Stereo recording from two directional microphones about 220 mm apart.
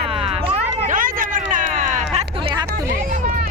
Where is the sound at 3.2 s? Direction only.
40° right (ahead or behind).